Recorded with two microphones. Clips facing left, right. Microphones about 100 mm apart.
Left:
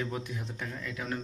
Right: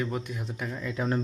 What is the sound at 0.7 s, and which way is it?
Speech, 20° right (ahead or behind).